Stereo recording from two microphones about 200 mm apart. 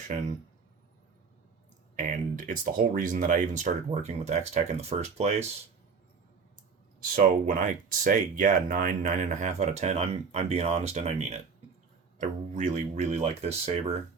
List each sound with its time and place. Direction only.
2.0 s speech: 40° right (ahead or behind)
7.2 s speech: 40° right (ahead or behind)